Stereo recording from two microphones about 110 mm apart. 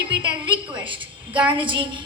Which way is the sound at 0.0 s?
45° right (ahead or behind).